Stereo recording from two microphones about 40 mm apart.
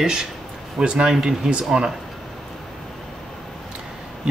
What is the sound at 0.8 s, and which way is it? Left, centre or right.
Speech, right.